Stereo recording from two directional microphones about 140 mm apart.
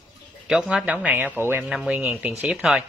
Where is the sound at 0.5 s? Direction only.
5° right (ahead or behind).